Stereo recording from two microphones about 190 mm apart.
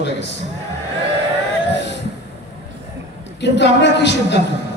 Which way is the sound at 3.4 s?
65° left (ahead or behind).